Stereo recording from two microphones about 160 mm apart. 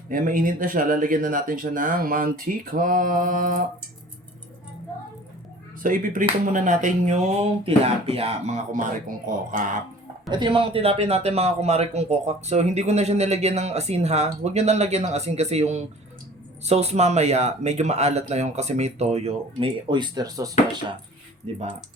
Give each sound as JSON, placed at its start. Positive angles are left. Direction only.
{"t": 0.1, "sound": "speech", "side_deg": -55}
{"t": 5.8, "sound": "speech", "side_deg": -55}
{"t": 10.3, "sound": "a man's voice", "side_deg": -30}
{"t": 21.5, "sound": "a man's voice", "side_deg": -40}